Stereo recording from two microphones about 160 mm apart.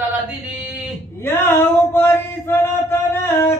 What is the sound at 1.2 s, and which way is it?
Male singing, 15° left (ahead or behind).